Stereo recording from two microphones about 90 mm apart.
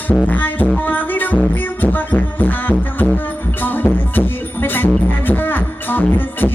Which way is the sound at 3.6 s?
20° left (ahead or behind).